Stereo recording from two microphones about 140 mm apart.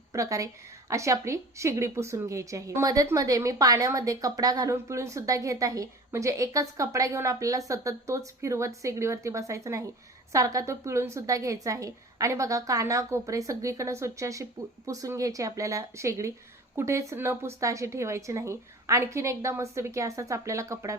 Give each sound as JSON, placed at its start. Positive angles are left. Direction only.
{"t": 0.1, "sound": "a woman's voice", "side_deg": -25}